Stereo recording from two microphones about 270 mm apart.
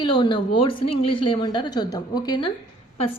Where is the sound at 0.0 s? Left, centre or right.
Centre.